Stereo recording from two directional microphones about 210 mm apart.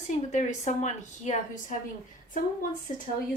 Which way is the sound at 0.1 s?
35° left (ahead or behind).